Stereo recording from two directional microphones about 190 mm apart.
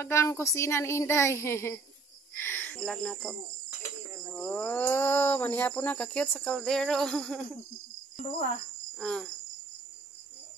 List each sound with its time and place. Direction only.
0.0 s speech: 15° left (ahead or behind)
9.0 s cricket: centre (ahead or behind)